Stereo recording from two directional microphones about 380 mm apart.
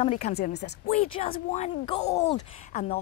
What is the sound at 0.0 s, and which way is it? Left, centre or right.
Speech, centre.